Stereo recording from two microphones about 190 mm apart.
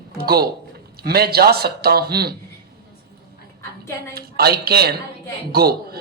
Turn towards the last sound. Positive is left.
turn(degrees=-55)  # may be behind; listen again after turning